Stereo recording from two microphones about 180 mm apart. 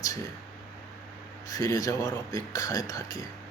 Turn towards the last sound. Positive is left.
turn(degrees=20)  # may be behind; listen again after turning